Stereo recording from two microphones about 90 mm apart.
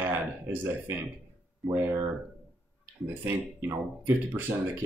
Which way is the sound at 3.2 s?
25° right (ahead or behind).